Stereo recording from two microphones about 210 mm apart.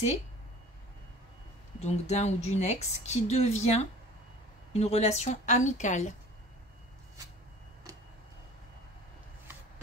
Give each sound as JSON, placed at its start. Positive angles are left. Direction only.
{"t": 1.8, "sound": "speech", "side_deg": 30}